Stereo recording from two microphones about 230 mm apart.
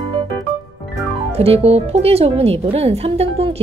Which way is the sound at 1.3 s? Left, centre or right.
Right.